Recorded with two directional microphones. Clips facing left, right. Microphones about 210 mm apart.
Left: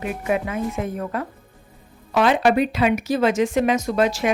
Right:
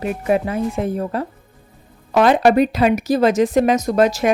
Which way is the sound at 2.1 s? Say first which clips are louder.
Right 4 dB; 40° right (ahead or behind).